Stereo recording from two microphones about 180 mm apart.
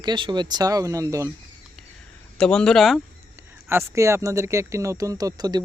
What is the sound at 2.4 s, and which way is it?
Speech, 5° left (ahead or behind).